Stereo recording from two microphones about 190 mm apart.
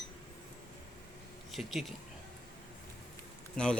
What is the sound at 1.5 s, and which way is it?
Speech, centre (ahead or behind).